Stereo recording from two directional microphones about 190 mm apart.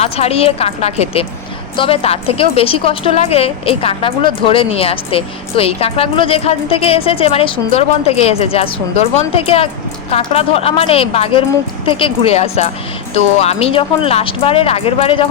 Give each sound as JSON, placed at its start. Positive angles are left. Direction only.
{"t": 0.0, "sound": "a woman's voice", "side_deg": 30}